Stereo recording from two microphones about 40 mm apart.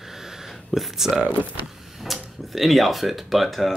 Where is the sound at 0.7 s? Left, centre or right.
Centre.